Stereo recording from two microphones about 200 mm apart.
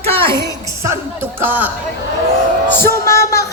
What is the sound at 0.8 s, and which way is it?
Speech, 15° right (ahead or behind).